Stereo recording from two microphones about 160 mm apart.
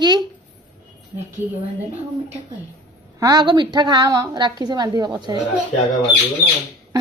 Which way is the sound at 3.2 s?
25° right (ahead or behind).